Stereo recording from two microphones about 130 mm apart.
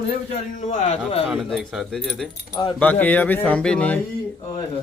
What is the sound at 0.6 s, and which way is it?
Speech, 65° left (ahead or behind).